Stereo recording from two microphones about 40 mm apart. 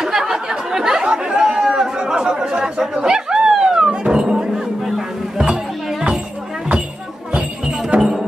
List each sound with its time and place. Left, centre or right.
0.0 s chatter: centre
3.0 s music: centre
4.9 s a sound: centre
7.9 s music: right